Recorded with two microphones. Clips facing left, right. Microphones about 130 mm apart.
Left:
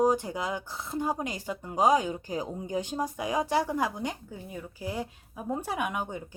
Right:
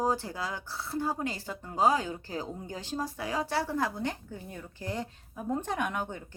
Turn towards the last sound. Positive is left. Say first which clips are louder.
# left 1 dB
turn(degrees=10)  # may be behind; listen again after turning